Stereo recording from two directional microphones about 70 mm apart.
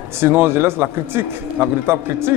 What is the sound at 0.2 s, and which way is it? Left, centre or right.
Speech, right.